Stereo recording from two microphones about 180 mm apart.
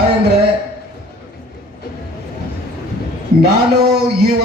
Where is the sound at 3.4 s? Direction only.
60° right (ahead or behind).